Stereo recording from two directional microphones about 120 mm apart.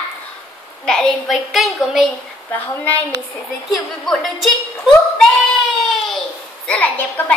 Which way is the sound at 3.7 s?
Centre (ahead or behind).